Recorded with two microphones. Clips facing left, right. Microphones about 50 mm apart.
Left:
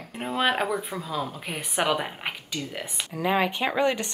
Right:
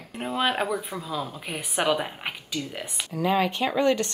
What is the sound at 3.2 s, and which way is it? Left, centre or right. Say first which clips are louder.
Speech: even; centre.